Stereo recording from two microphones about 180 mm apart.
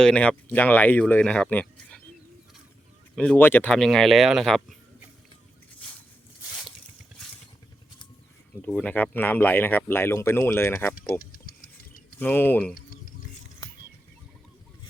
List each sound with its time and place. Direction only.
0.0 s speech: 5° left (ahead or behind)
3.2 s speech: 10° left (ahead or behind)
8.6 s speech: 5° left (ahead or behind)
11.2 s a sound: 55° left (ahead or behind)
12.2 s speech: 10° left (ahead or behind)
12.7 s a sound: 55° left (ahead or behind)